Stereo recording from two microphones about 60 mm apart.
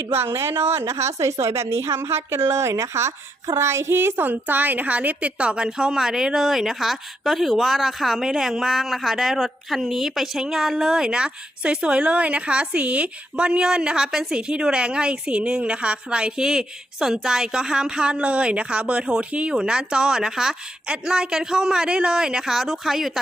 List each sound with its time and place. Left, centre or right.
0.1 s a woman's voice: right
0.9 s a woman's voice: right; by 23.2 s centre